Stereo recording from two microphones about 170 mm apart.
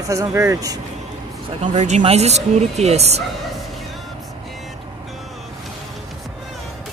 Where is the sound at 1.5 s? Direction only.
40° right (ahead or behind).